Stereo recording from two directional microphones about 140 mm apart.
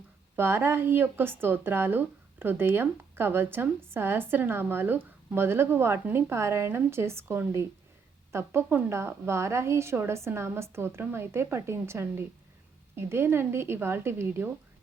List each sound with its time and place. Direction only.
0.3 s a woman's voice: 15° right (ahead or behind)